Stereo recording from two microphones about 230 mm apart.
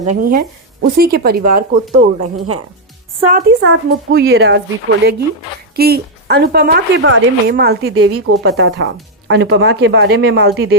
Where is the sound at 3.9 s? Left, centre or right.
Right.